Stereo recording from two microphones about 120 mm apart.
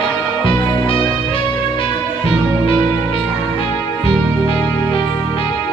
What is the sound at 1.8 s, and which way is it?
Music, 50° left (ahead or behind).